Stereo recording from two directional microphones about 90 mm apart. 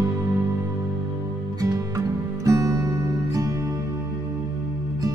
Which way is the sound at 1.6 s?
40° right (ahead or behind).